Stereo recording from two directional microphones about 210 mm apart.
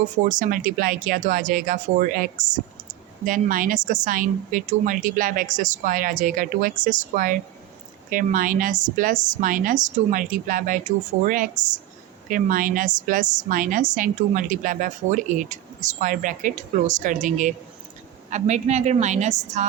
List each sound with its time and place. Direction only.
0.3 s a woman's voice: 40° right (ahead or behind)